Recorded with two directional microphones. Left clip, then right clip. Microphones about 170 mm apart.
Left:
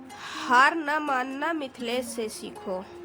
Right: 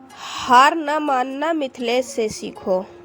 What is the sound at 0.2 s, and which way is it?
A woman's voice, 35° right (ahead or behind).